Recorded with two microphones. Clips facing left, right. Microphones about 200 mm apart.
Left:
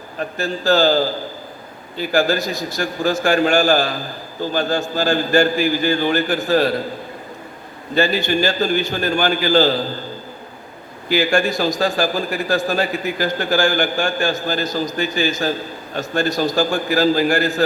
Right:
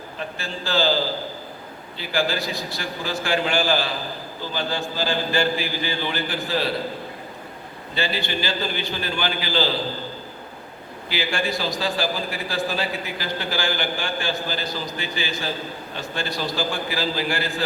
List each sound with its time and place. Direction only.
0.2 s a man's voice: 45° left (ahead or behind)
7.9 s a man's voice: 45° left (ahead or behind)
11.1 s a man's voice: 45° left (ahead or behind)